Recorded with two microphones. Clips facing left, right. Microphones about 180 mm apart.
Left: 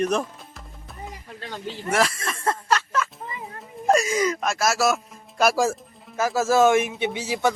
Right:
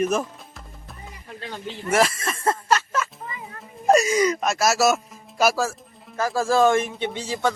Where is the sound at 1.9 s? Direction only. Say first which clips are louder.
Right 3 dB; 5° right (ahead or behind).